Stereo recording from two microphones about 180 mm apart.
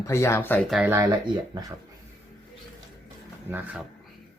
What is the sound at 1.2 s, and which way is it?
Speech, 20° right (ahead or behind).